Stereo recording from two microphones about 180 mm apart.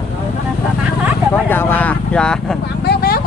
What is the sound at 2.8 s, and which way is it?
Vehicle, 60° left (ahead or behind).